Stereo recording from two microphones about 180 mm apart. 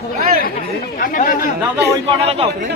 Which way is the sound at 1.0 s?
50° left (ahead or behind).